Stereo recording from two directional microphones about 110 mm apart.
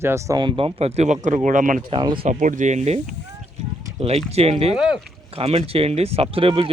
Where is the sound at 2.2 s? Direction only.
80° right.